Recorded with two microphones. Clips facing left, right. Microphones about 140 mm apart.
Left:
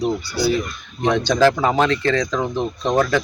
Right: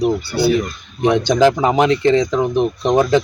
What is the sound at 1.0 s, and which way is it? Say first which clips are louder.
Speech: right 3 dB; 15° right (ahead or behind).